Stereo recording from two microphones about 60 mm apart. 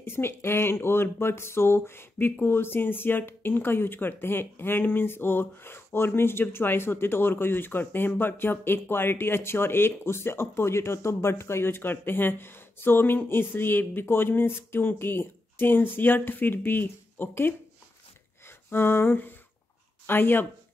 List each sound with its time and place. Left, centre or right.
0.0 s speech: left
18.7 s speech: left